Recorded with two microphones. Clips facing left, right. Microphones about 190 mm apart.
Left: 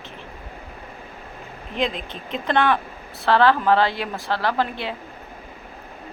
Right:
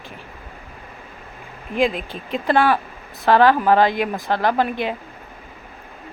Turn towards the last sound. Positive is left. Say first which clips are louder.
# right 4 dB
turn(degrees=-15)  # may be behind; listen again after turning